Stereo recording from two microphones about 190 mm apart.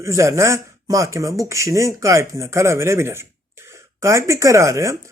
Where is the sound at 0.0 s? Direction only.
15° right (ahead or behind).